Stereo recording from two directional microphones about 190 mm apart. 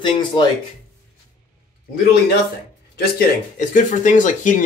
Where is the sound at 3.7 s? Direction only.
40° left (ahead or behind).